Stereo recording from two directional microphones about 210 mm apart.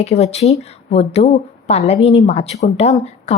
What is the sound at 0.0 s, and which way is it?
A woman's voice, 30° left (ahead or behind).